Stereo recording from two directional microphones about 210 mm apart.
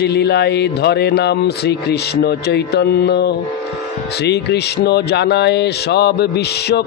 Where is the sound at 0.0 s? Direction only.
50° left (ahead or behind).